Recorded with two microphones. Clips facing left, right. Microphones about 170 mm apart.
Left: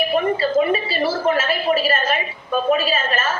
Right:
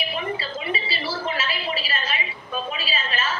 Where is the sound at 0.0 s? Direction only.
50° left (ahead or behind).